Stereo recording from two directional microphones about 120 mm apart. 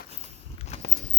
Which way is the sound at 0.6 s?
60° left (ahead or behind).